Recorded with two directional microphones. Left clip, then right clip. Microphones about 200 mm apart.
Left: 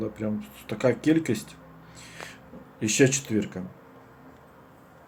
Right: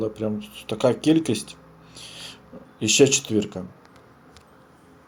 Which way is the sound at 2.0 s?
15° right (ahead or behind).